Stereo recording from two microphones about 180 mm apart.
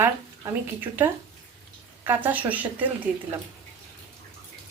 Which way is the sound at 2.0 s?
10° right (ahead or behind).